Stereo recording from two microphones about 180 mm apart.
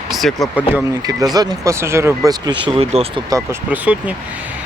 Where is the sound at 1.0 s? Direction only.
20° right (ahead or behind).